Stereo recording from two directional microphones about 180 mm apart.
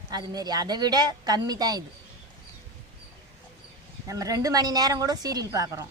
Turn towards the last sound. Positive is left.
turn(degrees=-20)  # may be behind; listen again after turning